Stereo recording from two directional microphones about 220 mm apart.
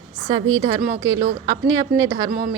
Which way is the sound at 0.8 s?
10° right (ahead or behind).